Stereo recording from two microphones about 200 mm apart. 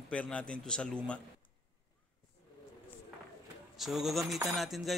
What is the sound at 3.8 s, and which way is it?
A man's voice, centre (ahead or behind).